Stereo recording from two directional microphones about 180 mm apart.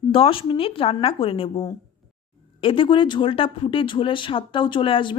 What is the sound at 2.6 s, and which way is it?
A woman's voice, 30° left (ahead or behind).